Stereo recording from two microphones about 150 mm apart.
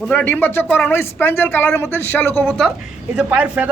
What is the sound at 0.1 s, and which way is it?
Speech, 10° left (ahead or behind).